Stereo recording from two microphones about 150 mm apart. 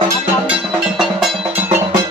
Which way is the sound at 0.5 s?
5° right (ahead or behind).